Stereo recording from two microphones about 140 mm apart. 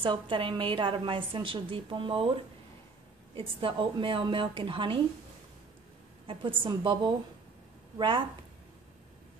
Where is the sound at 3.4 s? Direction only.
40° right (ahead or behind).